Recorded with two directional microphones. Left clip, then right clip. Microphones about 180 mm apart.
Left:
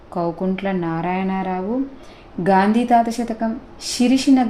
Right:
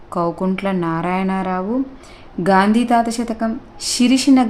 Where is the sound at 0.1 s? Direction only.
25° right (ahead or behind).